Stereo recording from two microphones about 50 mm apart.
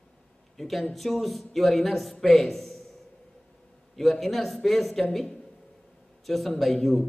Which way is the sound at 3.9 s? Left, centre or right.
Centre.